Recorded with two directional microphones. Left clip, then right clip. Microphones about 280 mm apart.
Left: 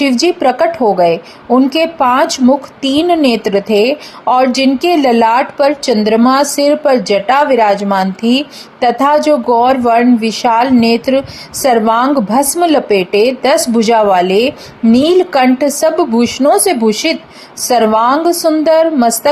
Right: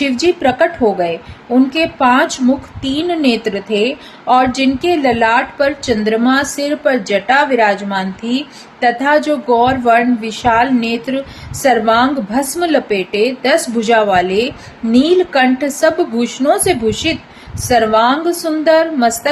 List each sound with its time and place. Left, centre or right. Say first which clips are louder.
0.0 s a woman's voice: left 3 dB; left